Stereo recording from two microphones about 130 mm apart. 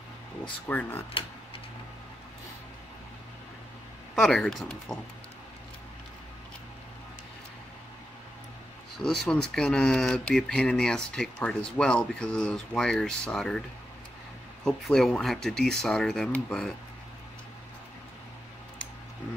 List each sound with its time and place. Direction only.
0.7 s speech: 15° left (ahead or behind)
4.1 s speech: 5° left (ahead or behind)
8.9 s speech: centre (ahead or behind)
14.6 s speech: centre (ahead or behind)